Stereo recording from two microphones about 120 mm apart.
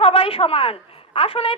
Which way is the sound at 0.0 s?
50° left (ahead or behind).